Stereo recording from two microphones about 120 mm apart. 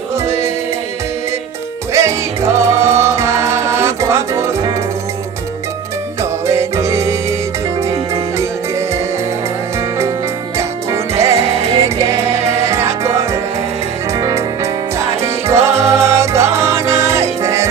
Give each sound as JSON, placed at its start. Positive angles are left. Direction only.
{"t": 0.3, "sound": "music", "side_deg": -25}
{"t": 1.9, "sound": "music", "side_deg": -25}
{"t": 6.5, "sound": "music", "side_deg": -25}
{"t": 10.6, "sound": "music", "side_deg": -25}